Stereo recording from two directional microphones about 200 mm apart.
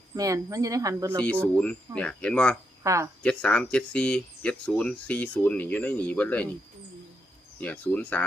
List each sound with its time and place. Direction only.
0.2 s speech: 15° right (ahead or behind)
1.2 s speech: 5° left (ahead or behind)
2.8 s speech: 15° right (ahead or behind)
3.2 s speech: 5° left (ahead or behind)
7.6 s speech: 5° left (ahead or behind)